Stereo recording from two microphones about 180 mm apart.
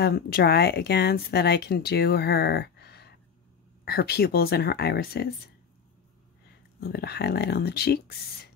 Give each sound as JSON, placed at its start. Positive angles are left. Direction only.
{"t": 0.0, "sound": "speech", "side_deg": 60}
{"t": 6.8, "sound": "speech", "side_deg": 65}